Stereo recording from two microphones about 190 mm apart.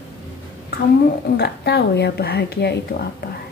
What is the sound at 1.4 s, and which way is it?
A woman's voice, 60° left (ahead or behind).